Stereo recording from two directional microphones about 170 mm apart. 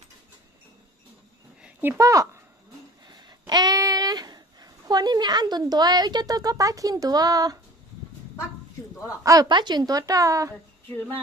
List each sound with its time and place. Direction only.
1.6 s speech: 10° right (ahead or behind)
9.2 s a woman's voice: 20° right (ahead or behind)